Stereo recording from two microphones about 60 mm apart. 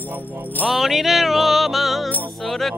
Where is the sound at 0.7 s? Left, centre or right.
Centre.